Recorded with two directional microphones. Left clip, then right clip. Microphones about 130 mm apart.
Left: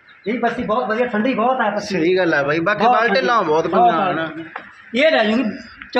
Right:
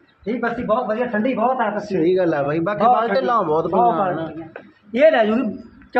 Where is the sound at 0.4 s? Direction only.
20° left (ahead or behind).